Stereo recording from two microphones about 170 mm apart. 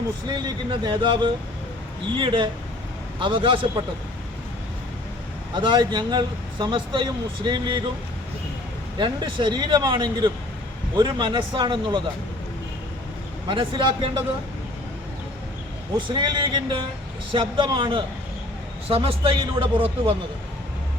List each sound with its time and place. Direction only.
0.3 s a man's voice: 25° right (ahead or behind)
5.5 s speech: 30° right (ahead or behind)
9.0 s speech: 30° right (ahead or behind)
13.5 s speech: 30° right (ahead or behind)
16.0 s a man's voice: 30° right (ahead or behind)